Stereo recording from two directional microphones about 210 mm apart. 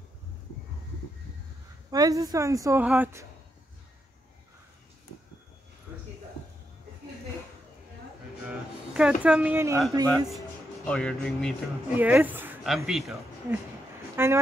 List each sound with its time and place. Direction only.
1.9 s a woman's voice: 15° right (ahead or behind)
8.5 s a sound: 5° right (ahead or behind)
10.0 s a man's voice: 5° left (ahead or behind)
12.0 s a woman's voice: 10° right (ahead or behind)